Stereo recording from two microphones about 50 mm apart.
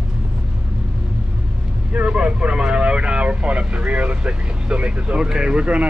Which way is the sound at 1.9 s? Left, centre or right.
Right.